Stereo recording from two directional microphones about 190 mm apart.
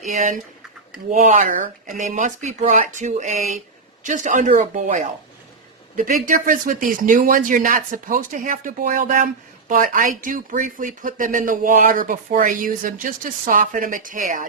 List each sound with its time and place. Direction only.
0.0 s speech: 40° right (ahead or behind)